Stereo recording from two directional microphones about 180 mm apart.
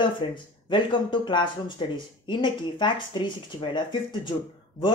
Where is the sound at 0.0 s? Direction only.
25° left (ahead or behind).